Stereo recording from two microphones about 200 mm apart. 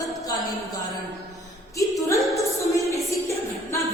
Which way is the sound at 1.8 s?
15° left (ahead or behind).